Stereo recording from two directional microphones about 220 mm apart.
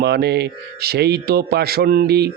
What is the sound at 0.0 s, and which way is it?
Speech, 50° right (ahead or behind).